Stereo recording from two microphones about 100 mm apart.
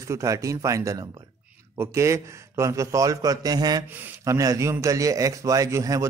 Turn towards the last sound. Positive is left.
turn(degrees=-35)  # may be behind; listen again after turning